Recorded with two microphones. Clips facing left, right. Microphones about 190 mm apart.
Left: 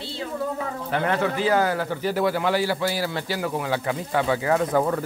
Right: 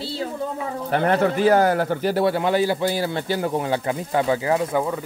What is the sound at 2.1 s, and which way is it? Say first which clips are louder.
A man's voice: right 2 dB; 25° right (ahead or behind).